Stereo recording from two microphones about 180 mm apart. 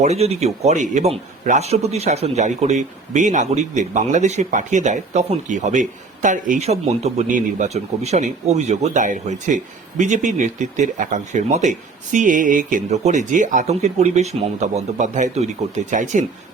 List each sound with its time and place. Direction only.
0.0 s speech: 35° right (ahead or behind)